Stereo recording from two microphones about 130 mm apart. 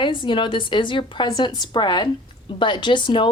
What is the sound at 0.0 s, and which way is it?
Speech, 40° left (ahead or behind).